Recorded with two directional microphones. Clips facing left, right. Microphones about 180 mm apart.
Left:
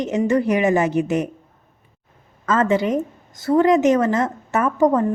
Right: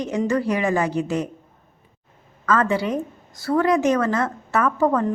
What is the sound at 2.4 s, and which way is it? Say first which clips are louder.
A woman's voice: left 2 dB; 25° left (ahead or behind).